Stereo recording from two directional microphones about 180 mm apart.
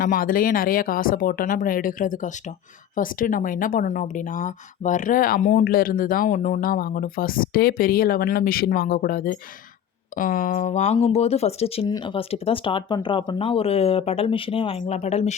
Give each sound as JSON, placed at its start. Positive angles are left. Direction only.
{"t": 0.0, "sound": "speech", "side_deg": 50}